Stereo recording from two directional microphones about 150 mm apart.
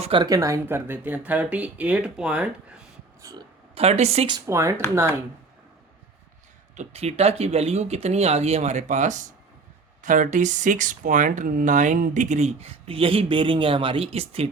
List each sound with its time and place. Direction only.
0.0 s speech: 35° right (ahead or behind)
0.3 s speech: 20° right (ahead or behind)
3.2 s a sound: 25° right (ahead or behind)
3.8 s speech: 45° right (ahead or behind)
4.3 s speech: 20° right (ahead or behind)
6.7 s speech: 45° right (ahead or behind)